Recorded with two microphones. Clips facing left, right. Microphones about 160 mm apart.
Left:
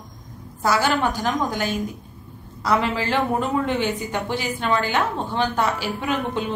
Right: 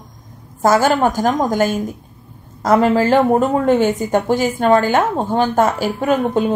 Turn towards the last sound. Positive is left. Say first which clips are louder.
# right 9 dB
turn(degrees=-45)  # may be behind; listen again after turning